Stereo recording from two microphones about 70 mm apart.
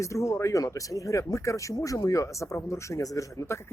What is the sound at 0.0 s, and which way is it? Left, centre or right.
Speech, left.